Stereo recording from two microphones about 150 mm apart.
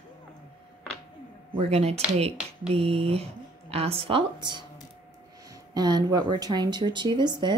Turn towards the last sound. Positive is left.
turn(degrees=-30)  # may be behind; listen again after turning